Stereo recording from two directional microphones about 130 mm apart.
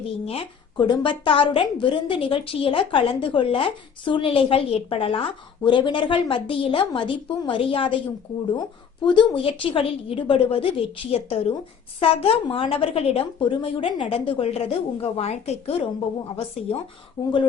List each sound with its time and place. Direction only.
0.3 s a woman's voice: 45° left (ahead or behind)
9.0 s a woman's voice: 40° left (ahead or behind)
17.2 s speech: 40° left (ahead or behind)